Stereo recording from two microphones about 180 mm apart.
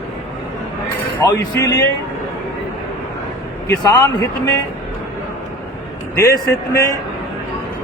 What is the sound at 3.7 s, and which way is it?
Speech, 15° left (ahead or behind).